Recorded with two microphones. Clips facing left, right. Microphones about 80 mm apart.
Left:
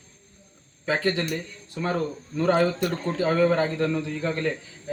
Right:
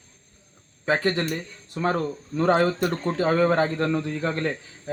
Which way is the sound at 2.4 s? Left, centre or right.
Right.